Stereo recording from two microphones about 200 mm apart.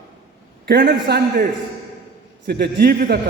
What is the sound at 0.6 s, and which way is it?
Speech, 50° right (ahead or behind).